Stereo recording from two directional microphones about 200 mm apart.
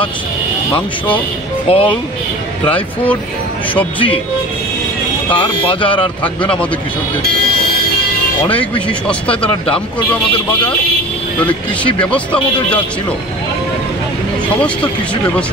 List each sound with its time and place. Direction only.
1.7 s speech: 30° left (ahead or behind)
3.7 s speech: 25° left (ahead or behind)
5.3 s speech: 25° left (ahead or behind)
8.5 s speech: 25° left (ahead or behind)
9.0 s speech: 5° left (ahead or behind)
12.0 s speech: 5° left (ahead or behind)